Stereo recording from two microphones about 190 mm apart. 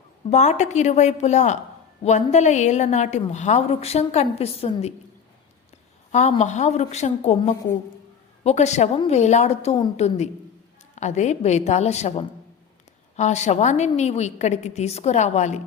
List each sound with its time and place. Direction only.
0.3 s a woman's voice: 35° left (ahead or behind)
6.1 s a woman's voice: 35° left (ahead or behind)